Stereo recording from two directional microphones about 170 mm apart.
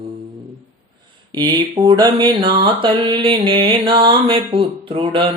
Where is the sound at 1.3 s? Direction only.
25° right (ahead or behind).